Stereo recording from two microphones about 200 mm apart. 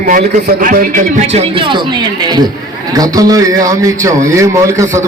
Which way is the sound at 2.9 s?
20° right (ahead or behind).